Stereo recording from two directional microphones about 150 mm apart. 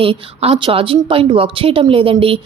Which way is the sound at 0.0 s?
40° right (ahead or behind).